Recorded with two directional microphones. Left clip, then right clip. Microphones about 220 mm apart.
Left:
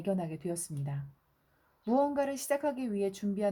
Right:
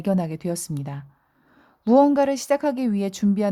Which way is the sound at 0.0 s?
40° right (ahead or behind).